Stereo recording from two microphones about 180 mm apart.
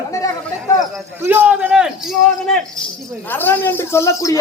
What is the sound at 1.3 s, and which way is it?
Speech, 10° right (ahead or behind).